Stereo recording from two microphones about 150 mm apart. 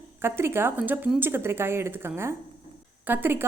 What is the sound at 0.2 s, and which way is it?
A woman's voice, 15° right (ahead or behind).